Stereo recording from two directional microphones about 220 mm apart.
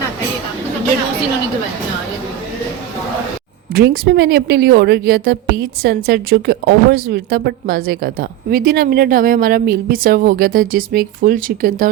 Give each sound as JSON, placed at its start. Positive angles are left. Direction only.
{"t": 3.8, "sound": "a woman's voice", "side_deg": -45}